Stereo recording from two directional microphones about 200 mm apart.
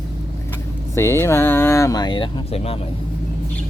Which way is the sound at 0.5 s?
15° left (ahead or behind).